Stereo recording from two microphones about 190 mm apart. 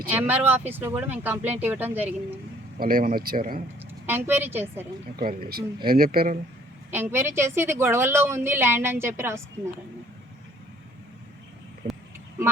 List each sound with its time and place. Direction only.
0.1 s a woman's voice: 10° right (ahead or behind)
2.7 s speech: 50° right (ahead or behind)
3.8 s a woman's voice: 10° right (ahead or behind)
5.1 s speech: 50° right (ahead or behind)
6.9 s a woman's voice: 10° right (ahead or behind)